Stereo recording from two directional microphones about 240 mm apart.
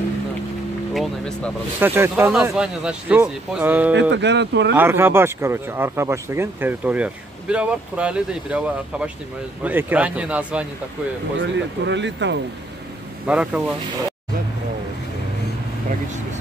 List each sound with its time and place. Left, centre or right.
0.9 s speech: centre
1.8 s speech: centre
3.9 s speech: right
4.7 s speech: centre
11.5 s speech: right
13.3 s speech: centre